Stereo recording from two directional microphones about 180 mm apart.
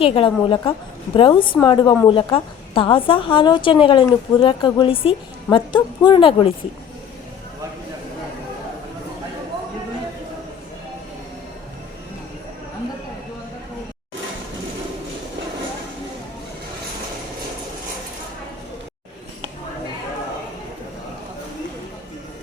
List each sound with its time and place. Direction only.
0.0 s a woman's voice: 30° left (ahead or behind)